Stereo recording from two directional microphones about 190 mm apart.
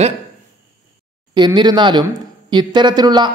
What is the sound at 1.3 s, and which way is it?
Speech, 25° right (ahead or behind).